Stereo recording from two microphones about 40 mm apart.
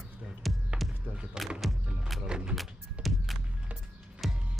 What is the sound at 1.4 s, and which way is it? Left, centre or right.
Music, centre.